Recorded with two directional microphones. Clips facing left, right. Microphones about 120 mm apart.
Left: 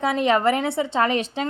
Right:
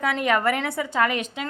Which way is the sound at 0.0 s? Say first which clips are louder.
Left 3 dB; 25° left (ahead or behind).